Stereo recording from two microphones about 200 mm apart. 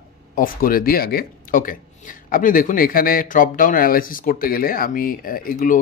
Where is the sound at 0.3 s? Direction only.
45° left (ahead or behind).